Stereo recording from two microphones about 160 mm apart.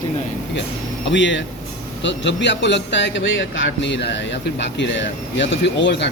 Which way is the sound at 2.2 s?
90° left.